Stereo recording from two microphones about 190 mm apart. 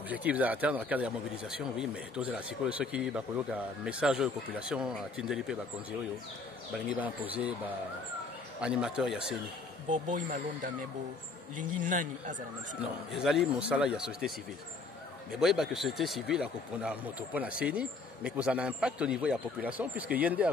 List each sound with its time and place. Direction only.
0.1 s speech: 10° right (ahead or behind)
7.0 s a man's voice: 5° right (ahead or behind)
8.5 s speech: 5° right (ahead or behind)
9.8 s speech: 45° right (ahead or behind)
13.1 s speech: centre (ahead or behind)
15.4 s a man's voice: centre (ahead or behind)